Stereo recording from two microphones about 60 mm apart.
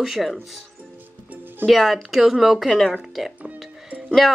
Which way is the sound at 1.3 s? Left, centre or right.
Right.